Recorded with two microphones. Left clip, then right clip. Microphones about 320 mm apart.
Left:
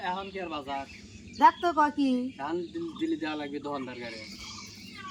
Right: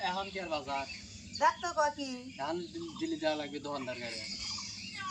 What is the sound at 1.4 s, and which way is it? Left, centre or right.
Speech, left.